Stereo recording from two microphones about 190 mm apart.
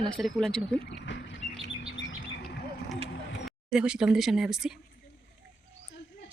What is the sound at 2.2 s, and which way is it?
Bird, 55° left (ahead or behind).